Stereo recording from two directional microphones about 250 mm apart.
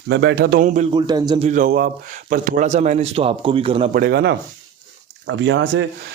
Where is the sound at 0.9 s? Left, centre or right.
Centre.